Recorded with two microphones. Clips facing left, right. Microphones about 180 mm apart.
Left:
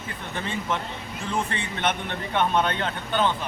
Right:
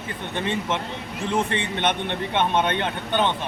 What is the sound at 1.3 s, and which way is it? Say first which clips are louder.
A man's voice: right 4 dB; 20° right (ahead or behind).